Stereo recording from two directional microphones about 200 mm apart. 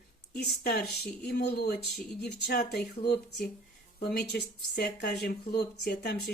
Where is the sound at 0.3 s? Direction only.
50° left (ahead or behind).